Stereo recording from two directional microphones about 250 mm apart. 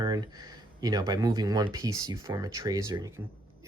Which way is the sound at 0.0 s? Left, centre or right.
Centre.